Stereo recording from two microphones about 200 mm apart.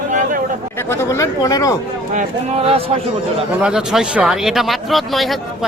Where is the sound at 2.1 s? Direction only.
30° right (ahead or behind).